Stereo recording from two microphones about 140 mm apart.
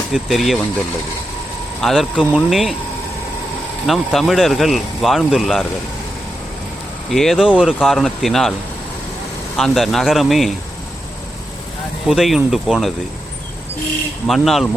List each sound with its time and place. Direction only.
0.1 s speech: centre (ahead or behind)
1.8 s speech: centre (ahead or behind)
3.8 s speech: centre (ahead or behind)
7.1 s speech: centre (ahead or behind)
9.6 s speech: centre (ahead or behind)
12.0 s speech: centre (ahead or behind)
14.3 s speech: centre (ahead or behind)